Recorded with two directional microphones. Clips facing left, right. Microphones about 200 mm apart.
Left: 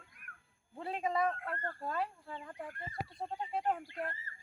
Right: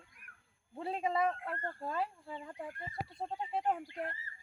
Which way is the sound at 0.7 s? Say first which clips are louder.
Right 1 dB; 25° right (ahead or behind).